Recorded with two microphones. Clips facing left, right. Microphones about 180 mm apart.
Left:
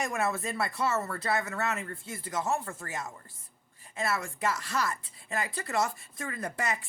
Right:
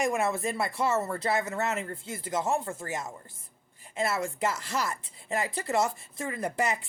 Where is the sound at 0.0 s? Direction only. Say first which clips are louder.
Right 4 dB; 15° right (ahead or behind).